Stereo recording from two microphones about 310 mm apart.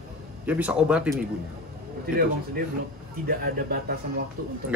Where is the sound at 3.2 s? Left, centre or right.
Right.